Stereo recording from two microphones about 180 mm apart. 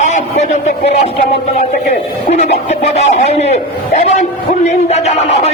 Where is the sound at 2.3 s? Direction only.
40° left (ahead or behind).